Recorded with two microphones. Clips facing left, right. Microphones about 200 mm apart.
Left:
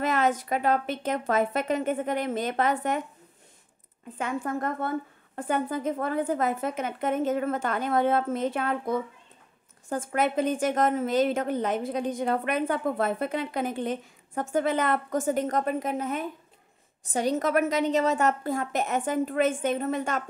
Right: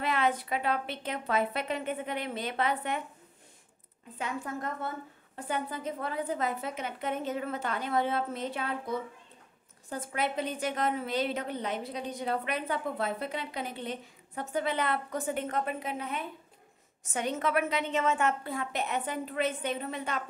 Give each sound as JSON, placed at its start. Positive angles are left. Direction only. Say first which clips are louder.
{"t": 0.0, "sound": "a woman's voice", "louder": "left 4 dB", "side_deg": 45}
{"t": 4.2, "sound": "a woman's voice", "louder": "left 6 dB", "side_deg": 55}